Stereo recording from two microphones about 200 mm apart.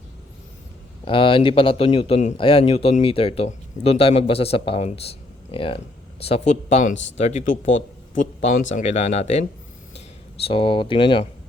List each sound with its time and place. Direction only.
1.0 s speech: 25° left (ahead or behind)